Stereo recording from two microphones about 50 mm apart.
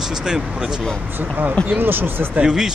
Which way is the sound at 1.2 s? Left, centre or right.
Right.